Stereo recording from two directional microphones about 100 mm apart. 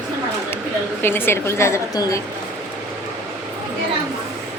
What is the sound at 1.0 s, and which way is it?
A woman's voice, 25° left (ahead or behind).